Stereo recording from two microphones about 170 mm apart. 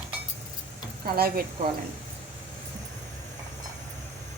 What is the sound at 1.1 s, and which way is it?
Speech, 60° right (ahead or behind).